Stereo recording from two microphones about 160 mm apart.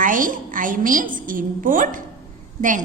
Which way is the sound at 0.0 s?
55° right (ahead or behind).